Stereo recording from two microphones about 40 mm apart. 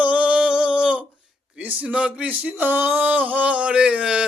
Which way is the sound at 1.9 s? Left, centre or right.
Right.